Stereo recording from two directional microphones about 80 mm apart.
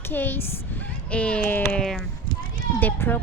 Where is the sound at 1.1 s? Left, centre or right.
Centre.